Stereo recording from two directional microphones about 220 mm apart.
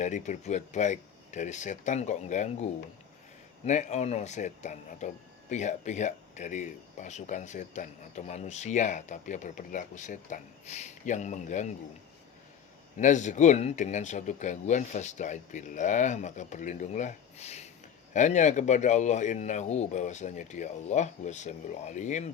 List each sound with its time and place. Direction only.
0.0 s speech: 35° left (ahead or behind)
3.7 s speech: 30° left (ahead or behind)
13.0 s speech: 35° left (ahead or behind)